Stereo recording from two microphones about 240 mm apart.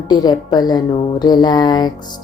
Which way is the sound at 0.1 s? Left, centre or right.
Centre.